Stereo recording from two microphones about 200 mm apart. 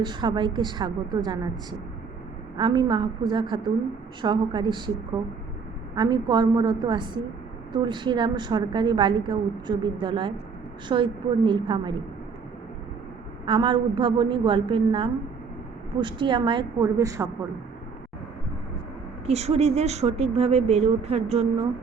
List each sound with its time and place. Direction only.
0.0 s a woman's voice: 20° right (ahead or behind)
2.6 s a woman's voice: 20° right (ahead or behind)
6.0 s a woman's voice: 20° right (ahead or behind)
13.4 s a woman's voice: 25° right (ahead or behind)
19.2 s a woman's voice: 30° right (ahead or behind)